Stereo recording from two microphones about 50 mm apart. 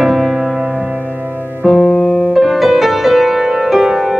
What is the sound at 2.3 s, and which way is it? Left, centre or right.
Music, centre.